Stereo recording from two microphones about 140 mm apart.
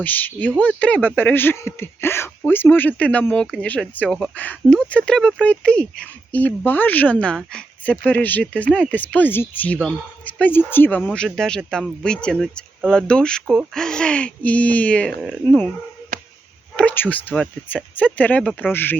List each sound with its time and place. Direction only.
0.0 s speech: 15° left (ahead or behind)
16.1 s chop: 75° right (ahead or behind)
16.7 s speech: 10° left (ahead or behind)